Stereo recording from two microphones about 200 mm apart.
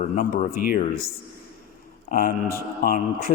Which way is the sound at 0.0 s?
40° left (ahead or behind).